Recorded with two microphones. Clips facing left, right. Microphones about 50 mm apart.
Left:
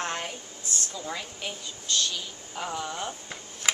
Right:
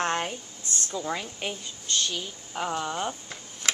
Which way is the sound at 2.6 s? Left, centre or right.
Centre.